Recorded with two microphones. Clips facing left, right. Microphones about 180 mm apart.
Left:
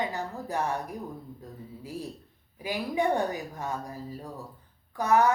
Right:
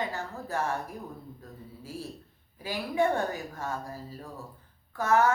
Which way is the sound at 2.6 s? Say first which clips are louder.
Even; 15° left (ahead or behind).